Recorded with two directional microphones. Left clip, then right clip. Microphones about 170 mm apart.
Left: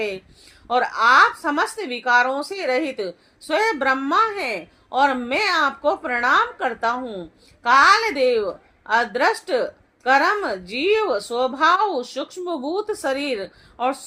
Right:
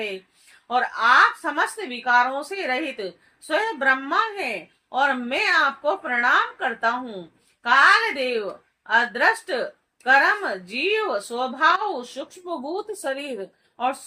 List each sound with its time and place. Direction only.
0.7 s a woman's voice: 45° left (ahead or behind)